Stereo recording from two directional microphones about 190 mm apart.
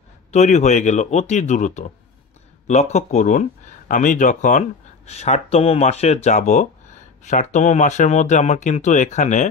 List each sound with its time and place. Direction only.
0.3 s speech: 35° left (ahead or behind)